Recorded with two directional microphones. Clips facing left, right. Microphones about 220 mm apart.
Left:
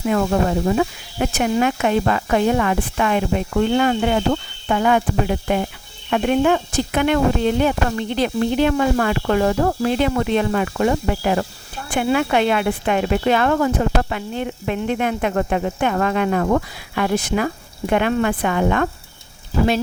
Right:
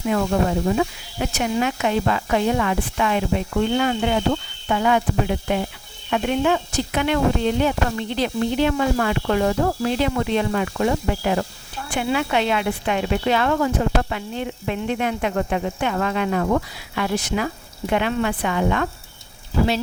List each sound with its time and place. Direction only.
0.1 s speech: 50° left (ahead or behind)